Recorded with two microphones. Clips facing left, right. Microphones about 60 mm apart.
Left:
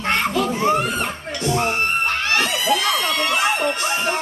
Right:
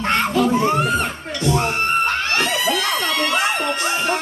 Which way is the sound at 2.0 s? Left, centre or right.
Right.